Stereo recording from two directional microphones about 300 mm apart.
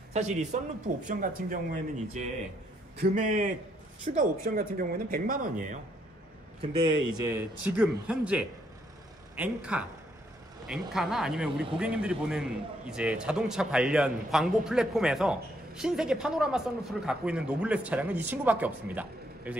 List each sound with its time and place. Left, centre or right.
0.1 s speech: right
6.8 s a man's voice: centre
10.9 s a man's voice: centre